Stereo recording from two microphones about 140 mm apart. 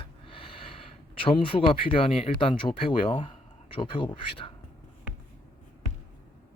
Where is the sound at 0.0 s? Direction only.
40° left (ahead or behind).